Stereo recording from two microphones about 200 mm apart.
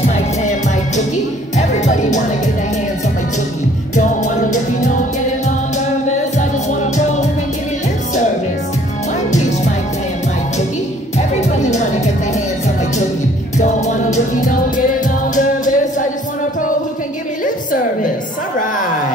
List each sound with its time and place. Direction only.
0.1 s music: 35° left (ahead or behind)
3.9 s music: 40° left (ahead or behind)
6.0 s music: 35° left (ahead or behind)
9.3 s music: 35° left (ahead or behind)
11.1 s music: 35° left (ahead or behind)
13.6 s music: 35° left (ahead or behind)